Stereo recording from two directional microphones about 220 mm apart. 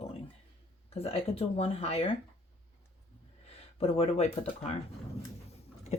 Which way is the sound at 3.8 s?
30° left (ahead or behind).